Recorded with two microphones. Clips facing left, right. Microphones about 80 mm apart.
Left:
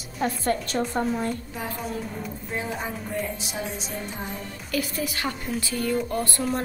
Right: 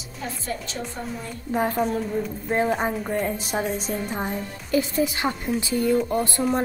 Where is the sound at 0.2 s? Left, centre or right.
Left.